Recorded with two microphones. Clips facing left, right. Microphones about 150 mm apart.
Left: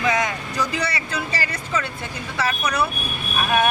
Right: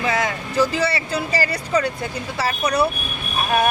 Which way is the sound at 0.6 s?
30° right (ahead or behind).